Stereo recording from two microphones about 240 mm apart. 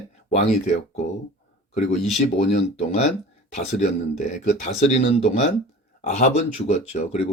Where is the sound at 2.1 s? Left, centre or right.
Left.